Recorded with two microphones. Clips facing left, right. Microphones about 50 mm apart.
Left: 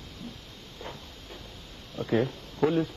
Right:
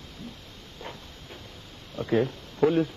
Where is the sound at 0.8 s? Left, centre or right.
Right.